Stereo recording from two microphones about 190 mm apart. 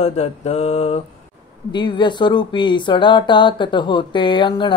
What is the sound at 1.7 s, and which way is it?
Speech, 25° left (ahead or behind).